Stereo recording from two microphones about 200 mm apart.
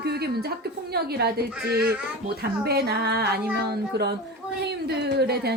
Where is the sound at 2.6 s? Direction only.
55° right (ahead or behind).